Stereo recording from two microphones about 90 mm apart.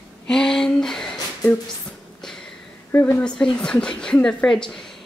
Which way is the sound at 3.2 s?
10° left (ahead or behind).